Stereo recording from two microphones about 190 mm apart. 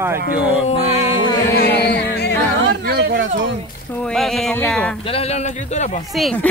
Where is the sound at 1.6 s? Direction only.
60° left (ahead or behind).